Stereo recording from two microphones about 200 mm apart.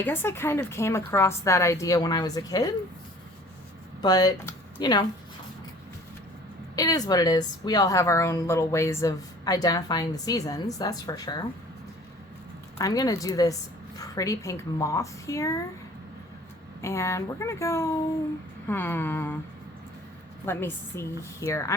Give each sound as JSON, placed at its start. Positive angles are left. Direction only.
{"t": 0.0, "sound": "a woman's voice", "side_deg": 10}
{"t": 4.0, "sound": "speech", "side_deg": 20}
{"t": 6.7, "sound": "a woman's voice", "side_deg": 20}
{"t": 12.8, "sound": "a woman's voice", "side_deg": 20}
{"t": 16.8, "sound": "a woman's voice", "side_deg": 15}
{"t": 20.4, "sound": "a woman's voice", "side_deg": 10}